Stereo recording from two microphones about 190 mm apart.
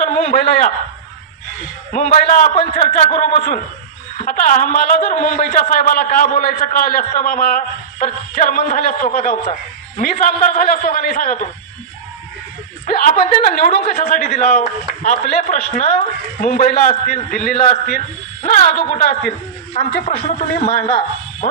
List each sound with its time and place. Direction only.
0.0 s a sound: 40° left (ahead or behind)
1.9 s a man's voice: 45° left (ahead or behind)
12.8 s a man's voice: 45° left (ahead or behind)
21.4 s speech: 45° left (ahead or behind)